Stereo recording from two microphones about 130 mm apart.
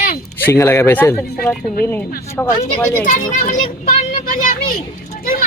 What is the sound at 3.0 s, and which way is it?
Speech, 85° left.